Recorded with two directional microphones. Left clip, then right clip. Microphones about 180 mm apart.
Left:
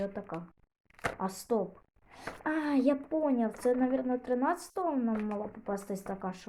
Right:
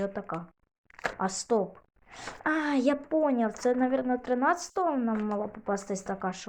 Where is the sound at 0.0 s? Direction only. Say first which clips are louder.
Right 4 dB; 15° right (ahead or behind).